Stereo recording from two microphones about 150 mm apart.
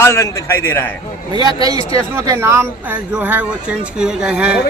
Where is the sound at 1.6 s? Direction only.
25° right (ahead or behind).